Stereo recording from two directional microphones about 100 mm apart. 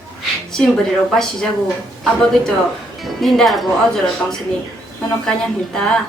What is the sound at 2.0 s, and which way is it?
A woman's voice, 5° left (ahead or behind).